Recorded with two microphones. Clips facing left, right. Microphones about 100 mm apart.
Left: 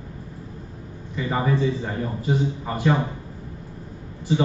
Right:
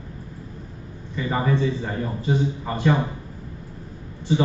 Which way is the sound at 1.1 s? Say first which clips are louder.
Even; 10° left (ahead or behind).